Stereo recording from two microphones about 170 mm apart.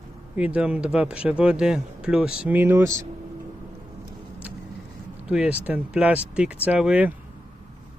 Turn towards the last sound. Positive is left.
turn(degrees=-5)  # may be behind; listen again after turning